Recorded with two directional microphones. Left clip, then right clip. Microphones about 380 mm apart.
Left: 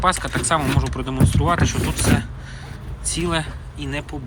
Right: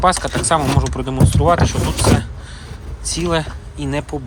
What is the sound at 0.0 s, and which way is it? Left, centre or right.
Speech, centre.